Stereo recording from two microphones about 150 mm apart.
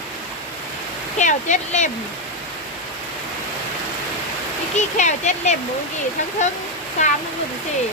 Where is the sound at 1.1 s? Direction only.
55° left (ahead or behind).